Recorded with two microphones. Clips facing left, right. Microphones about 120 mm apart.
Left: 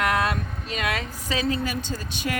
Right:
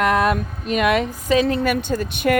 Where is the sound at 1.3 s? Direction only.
55° right (ahead or behind).